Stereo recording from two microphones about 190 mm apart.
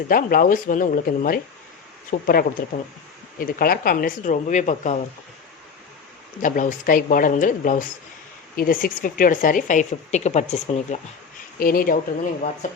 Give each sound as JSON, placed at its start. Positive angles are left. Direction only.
{"t": 0.1, "sound": "a woman's voice", "side_deg": 50}
{"t": 6.4, "sound": "a woman's voice", "side_deg": 45}
{"t": 11.6, "sound": "a woman's voice", "side_deg": 50}